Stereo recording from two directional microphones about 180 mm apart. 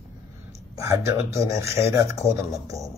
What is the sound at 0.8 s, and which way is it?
Speech, 15° right (ahead or behind).